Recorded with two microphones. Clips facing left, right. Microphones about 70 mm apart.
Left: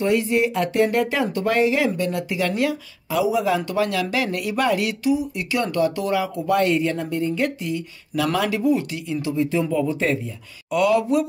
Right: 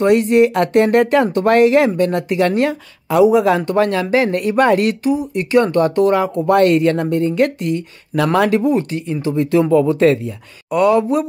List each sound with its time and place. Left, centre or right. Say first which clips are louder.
0.0 s speech: right 8 dB; right
4.0 s speech: right 8 dB; right
9.3 s speech: right 9 dB; right
10.7 s speech: right 5 dB; right